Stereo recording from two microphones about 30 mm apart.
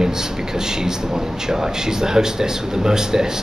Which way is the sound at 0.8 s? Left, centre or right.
Centre.